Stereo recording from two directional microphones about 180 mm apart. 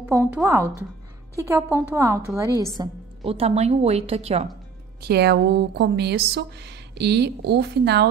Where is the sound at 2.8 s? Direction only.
30° right (ahead or behind).